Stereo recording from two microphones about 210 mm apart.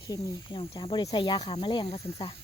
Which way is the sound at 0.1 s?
25° left (ahead or behind).